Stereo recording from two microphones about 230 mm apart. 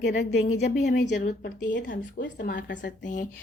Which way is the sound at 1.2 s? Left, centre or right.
Left.